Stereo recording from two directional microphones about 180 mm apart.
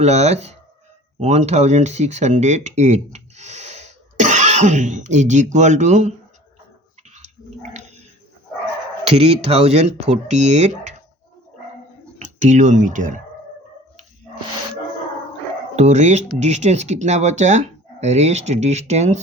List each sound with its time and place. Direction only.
0.0 s speech: 35° right (ahead or behind)
7.1 s a sound: 40° right (ahead or behind)
9.0 s speech: 35° right (ahead or behind)
12.2 s speech: 40° right (ahead or behind)
15.7 s speech: 40° right (ahead or behind)